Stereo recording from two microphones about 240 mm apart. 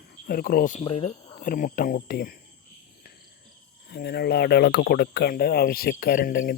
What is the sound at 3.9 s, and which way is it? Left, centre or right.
Speech, left.